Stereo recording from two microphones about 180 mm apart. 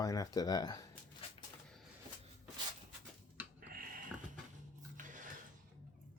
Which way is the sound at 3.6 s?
55° right (ahead or behind).